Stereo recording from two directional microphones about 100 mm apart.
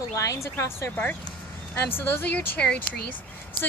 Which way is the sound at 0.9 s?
15° left (ahead or behind).